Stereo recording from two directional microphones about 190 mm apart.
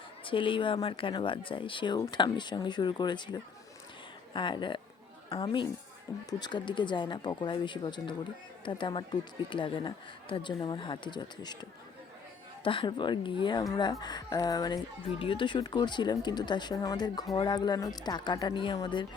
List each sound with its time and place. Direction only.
0.3 s speech: 25° left (ahead or behind)
12.6 s speech: 25° left (ahead or behind)